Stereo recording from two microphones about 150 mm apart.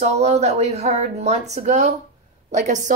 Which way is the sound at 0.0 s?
45° right (ahead or behind).